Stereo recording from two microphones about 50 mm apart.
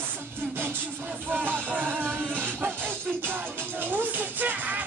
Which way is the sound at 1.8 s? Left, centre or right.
Right.